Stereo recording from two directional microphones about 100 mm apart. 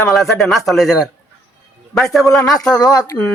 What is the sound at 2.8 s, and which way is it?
Speech, 40° left (ahead or behind).